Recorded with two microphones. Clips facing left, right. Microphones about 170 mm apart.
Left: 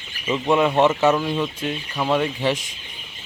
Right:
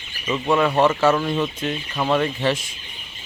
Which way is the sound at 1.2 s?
5° left (ahead or behind).